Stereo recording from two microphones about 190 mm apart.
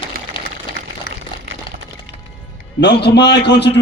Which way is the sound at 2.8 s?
60° left (ahead or behind).